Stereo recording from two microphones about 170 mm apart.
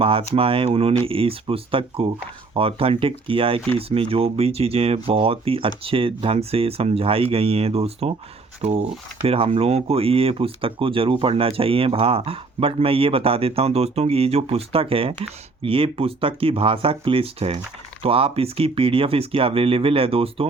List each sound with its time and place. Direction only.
0.0 s speech: 35° right (ahead or behind)
9.2 s speech: 35° right (ahead or behind)